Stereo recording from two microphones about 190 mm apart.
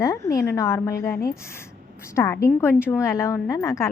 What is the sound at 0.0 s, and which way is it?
A woman's voice, 15° left (ahead or behind).